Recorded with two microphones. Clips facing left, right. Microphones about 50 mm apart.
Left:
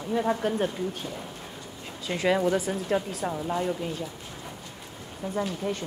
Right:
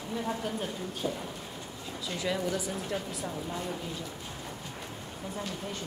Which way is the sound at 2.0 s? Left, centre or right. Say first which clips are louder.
Left 8 dB; left.